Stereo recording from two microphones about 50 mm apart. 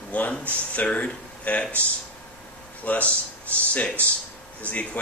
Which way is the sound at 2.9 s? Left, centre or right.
Left.